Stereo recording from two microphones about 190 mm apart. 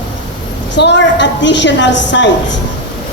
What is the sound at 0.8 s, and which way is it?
A woman's voice, 65° left (ahead or behind).